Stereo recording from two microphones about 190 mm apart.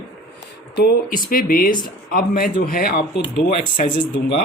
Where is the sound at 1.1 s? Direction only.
45° left (ahead or behind).